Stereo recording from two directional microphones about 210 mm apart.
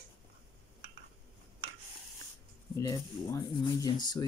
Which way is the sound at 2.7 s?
15° left (ahead or behind).